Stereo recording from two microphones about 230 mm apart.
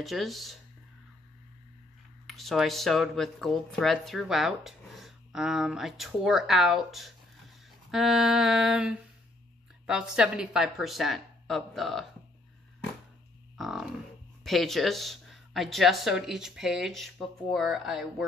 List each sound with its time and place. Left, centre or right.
0.0 s speech: centre
2.2 s speech: centre
13.6 s speech: centre